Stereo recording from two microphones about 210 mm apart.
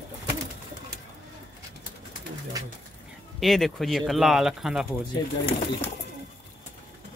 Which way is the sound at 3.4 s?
Centre (ahead or behind).